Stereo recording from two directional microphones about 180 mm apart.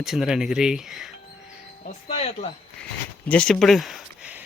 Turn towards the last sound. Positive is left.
turn(degrees=-10)  # may be behind; listen again after turning